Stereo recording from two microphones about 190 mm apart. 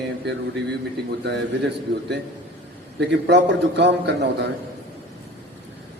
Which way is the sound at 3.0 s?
65° right (ahead or behind).